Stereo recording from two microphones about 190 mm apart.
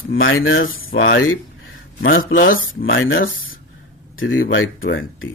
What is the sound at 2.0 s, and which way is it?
Speech, 50° left (ahead or behind).